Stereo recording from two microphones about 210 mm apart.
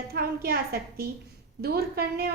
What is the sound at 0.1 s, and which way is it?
A woman's voice, 45° right (ahead or behind).